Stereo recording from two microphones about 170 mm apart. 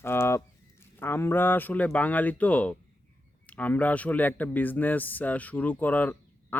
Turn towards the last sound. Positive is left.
turn(degrees=10)  # may be behind; listen again after turning